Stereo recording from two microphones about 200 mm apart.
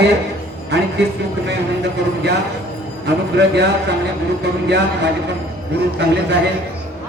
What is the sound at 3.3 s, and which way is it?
Speech, 55° right (ahead or behind).